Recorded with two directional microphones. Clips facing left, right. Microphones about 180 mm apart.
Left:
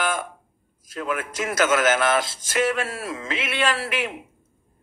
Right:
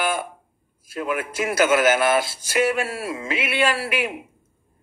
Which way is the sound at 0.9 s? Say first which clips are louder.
Right 2 dB; 10° right (ahead or behind).